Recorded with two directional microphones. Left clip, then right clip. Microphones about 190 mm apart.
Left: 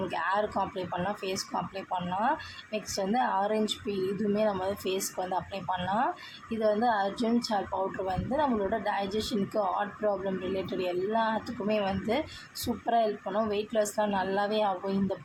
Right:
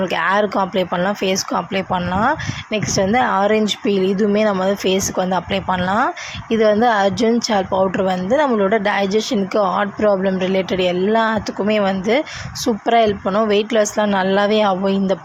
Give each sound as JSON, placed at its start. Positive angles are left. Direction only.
{"t": 0.1, "sound": "a woman's voice", "side_deg": -30}